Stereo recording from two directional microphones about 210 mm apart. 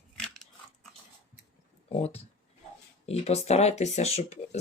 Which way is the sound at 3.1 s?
30° left (ahead or behind).